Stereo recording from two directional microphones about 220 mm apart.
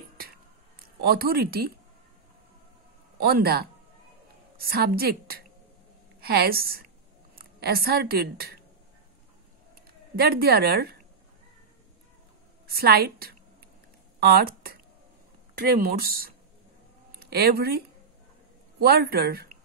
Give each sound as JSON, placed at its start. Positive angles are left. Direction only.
{"t": 1.0, "sound": "a woman's voice", "side_deg": -45}
{"t": 3.2, "sound": "a woman's voice", "side_deg": -45}
{"t": 10.1, "sound": "a woman's voice", "side_deg": -45}
{"t": 12.6, "sound": "a woman's voice", "side_deg": -45}